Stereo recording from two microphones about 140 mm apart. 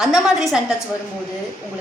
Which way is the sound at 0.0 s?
5° right (ahead or behind).